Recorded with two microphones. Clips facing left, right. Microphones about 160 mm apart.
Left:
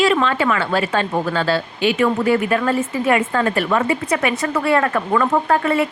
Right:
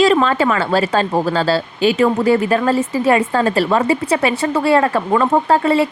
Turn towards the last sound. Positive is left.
turn(degrees=-30)  # may be behind; listen again after turning